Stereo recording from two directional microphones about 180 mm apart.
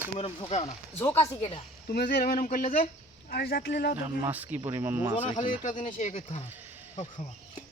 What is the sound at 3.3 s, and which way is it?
Speech, 60° left (ahead or behind).